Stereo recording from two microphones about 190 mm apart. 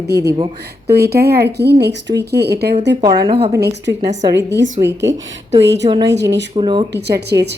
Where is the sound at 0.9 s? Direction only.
55° right (ahead or behind).